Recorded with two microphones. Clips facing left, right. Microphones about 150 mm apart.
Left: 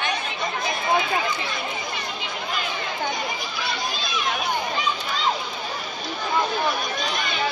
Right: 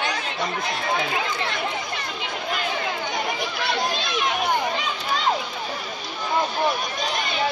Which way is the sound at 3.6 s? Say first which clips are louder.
Right 4 dB; 65° right (ahead or behind).